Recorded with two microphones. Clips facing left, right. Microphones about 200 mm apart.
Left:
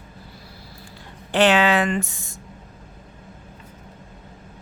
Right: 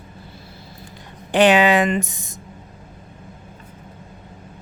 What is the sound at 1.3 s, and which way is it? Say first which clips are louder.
Speech: right 3 dB; 15° right (ahead or behind).